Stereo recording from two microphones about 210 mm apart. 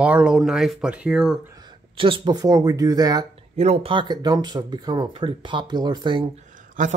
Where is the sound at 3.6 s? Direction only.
30° right (ahead or behind).